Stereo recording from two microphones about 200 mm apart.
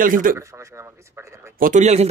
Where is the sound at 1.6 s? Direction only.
35° right (ahead or behind).